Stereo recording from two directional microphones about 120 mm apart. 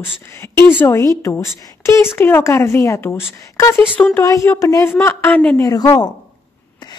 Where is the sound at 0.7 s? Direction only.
25° left (ahead or behind).